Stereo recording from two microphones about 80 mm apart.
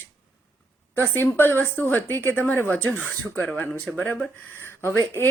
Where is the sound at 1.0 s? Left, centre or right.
Left.